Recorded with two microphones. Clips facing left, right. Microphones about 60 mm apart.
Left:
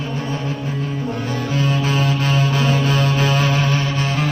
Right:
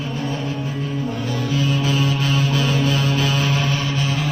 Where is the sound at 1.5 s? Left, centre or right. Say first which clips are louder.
Left 1 dB; left.